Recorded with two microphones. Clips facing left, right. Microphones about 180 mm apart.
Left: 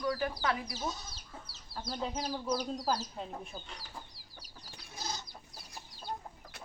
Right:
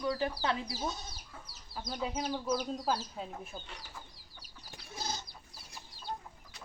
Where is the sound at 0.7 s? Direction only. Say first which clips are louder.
Right 1 dB; 25° left (ahead or behind).